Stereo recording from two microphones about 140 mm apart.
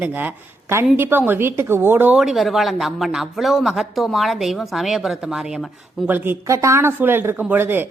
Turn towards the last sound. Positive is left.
turn(degrees=-15)  # may be behind; listen again after turning